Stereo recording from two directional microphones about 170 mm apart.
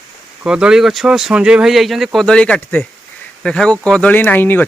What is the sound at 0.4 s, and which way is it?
Speech, 5° right (ahead or behind).